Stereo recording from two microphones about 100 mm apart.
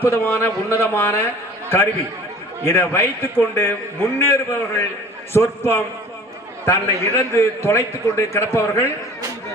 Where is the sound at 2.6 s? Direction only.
25° left (ahead or behind).